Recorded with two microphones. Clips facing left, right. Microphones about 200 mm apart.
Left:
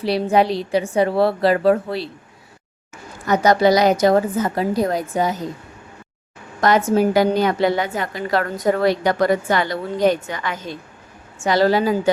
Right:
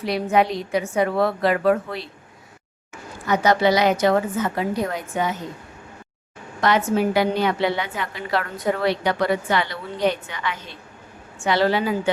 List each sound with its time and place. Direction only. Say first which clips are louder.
0.0 s a woman's voice: left 3 dB; 35° left (ahead or behind)
3.2 s a woman's voice: left 3 dB; 40° left (ahead or behind)
6.6 s a woman's voice: left 4 dB; 45° left (ahead or behind)